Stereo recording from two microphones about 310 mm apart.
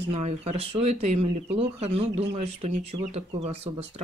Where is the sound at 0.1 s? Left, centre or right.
Centre.